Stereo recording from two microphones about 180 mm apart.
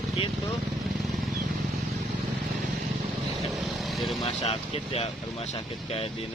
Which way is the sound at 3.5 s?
Centre (ahead or behind).